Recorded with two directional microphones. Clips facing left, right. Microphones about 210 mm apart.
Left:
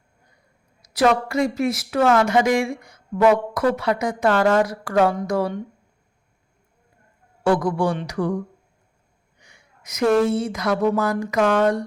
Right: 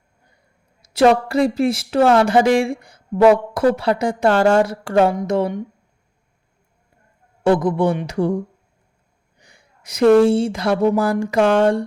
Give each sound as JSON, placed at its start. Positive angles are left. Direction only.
{"t": 0.8, "sound": "speech", "side_deg": -30}
{"t": 7.4, "sound": "speech", "side_deg": -20}
{"t": 9.4, "sound": "a sound", "side_deg": -35}
{"t": 10.2, "sound": "speech", "side_deg": -30}